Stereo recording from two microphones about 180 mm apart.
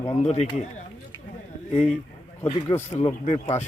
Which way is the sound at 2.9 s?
35° left (ahead or behind).